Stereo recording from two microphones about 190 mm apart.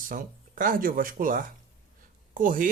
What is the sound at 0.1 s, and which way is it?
Speech, 45° right (ahead or behind).